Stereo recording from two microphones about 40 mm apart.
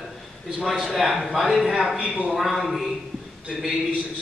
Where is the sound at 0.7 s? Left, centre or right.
Centre.